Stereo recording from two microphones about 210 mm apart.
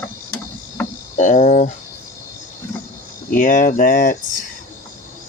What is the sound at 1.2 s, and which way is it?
Speech, 35° left (ahead or behind).